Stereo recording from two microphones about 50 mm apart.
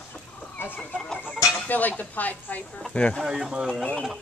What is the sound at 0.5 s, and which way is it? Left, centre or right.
Chicken, left.